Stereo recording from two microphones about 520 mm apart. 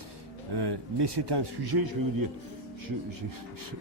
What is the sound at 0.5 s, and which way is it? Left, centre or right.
A man's voice, right.